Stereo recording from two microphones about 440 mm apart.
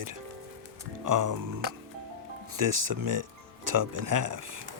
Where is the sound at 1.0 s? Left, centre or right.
Right.